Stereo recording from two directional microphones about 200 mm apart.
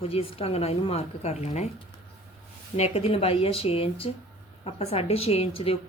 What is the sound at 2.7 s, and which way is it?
Speech, 30° left (ahead or behind).